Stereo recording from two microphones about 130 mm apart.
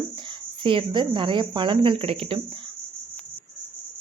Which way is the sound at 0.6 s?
40° right (ahead or behind).